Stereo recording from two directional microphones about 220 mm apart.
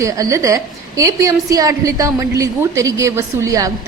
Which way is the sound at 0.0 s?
15° right (ahead or behind).